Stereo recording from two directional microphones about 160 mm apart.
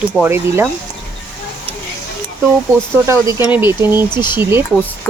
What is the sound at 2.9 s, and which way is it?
Speech, 15° right (ahead or behind).